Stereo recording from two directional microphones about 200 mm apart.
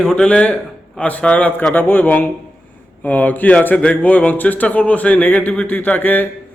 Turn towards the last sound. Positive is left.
turn(degrees=10)  # may be behind; listen again after turning